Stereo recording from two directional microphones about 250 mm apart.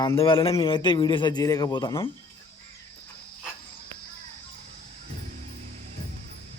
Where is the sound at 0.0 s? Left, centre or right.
Centre.